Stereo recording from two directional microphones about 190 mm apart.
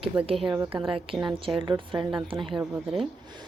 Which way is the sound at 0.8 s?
30° right (ahead or behind).